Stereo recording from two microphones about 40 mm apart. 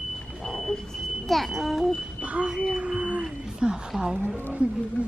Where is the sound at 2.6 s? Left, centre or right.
Right.